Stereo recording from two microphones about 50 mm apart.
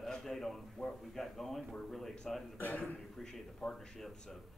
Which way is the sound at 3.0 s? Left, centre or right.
Centre.